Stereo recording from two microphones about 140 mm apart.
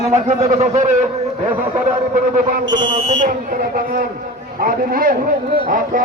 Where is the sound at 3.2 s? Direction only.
75° right (ahead or behind); by 5.6 s 90° right.